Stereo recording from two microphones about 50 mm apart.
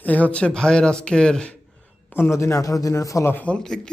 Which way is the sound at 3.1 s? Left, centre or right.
Left.